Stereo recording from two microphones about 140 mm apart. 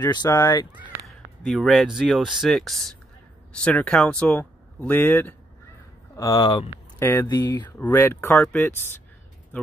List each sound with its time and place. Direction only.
0.4 s speech: 30° left (ahead or behind)
1.0 s speech: centre (ahead or behind)
6.1 s speech: 25° left (ahead or behind)
7.0 s speech: 15° left (ahead or behind)
7.2 s speech: 30° left (ahead or behind)
7.8 s speech: 15° left (ahead or behind)